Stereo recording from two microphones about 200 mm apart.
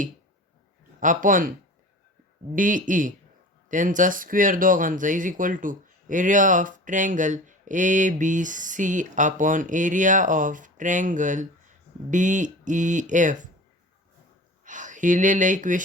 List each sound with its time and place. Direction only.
0.9 s speech: 40° right (ahead or behind)
2.6 s speech: 40° right (ahead or behind)
14.6 s speech: 40° right (ahead or behind)